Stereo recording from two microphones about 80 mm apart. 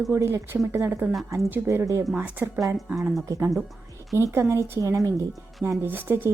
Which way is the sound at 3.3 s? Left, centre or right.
Right.